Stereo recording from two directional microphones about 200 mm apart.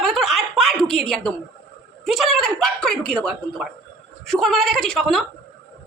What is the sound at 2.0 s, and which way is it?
A woman's voice, centre (ahead or behind).